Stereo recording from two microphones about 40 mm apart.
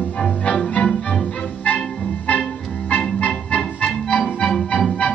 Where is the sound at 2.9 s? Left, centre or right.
Left.